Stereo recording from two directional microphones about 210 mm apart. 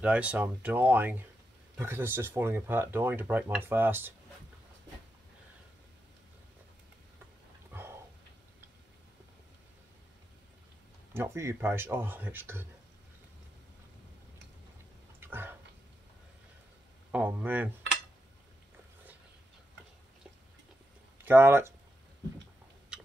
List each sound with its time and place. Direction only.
0.0 s speech: 5° right (ahead or behind)
11.1 s speech: 10° right (ahead or behind)
15.1 s a sound: 10° right (ahead or behind)
17.1 s speech: 10° right (ahead or behind)
21.2 s speech: 10° right (ahead or behind)